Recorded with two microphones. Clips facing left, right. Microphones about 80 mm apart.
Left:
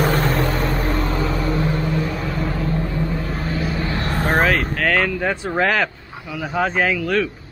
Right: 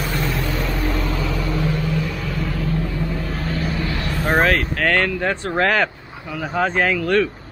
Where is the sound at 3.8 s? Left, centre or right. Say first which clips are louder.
Left 2 dB; left.